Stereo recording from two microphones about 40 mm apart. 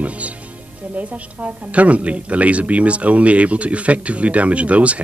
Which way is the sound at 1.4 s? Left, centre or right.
Right.